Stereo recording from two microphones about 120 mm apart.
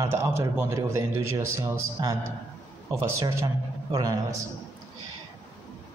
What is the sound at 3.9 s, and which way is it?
Speech, 30° right (ahead or behind).